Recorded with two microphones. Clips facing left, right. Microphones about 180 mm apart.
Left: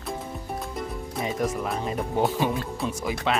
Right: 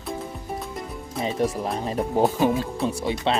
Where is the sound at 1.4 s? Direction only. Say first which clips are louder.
Right 2 dB; 35° right (ahead or behind).